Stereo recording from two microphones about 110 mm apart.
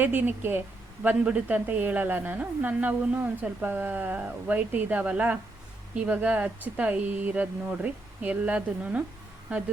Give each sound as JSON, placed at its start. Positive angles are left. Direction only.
{"t": 0.0, "sound": "a woman's voice", "side_deg": -15}